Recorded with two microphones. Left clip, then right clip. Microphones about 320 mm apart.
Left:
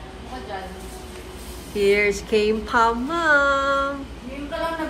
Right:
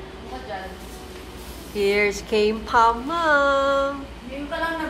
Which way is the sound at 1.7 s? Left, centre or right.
Centre.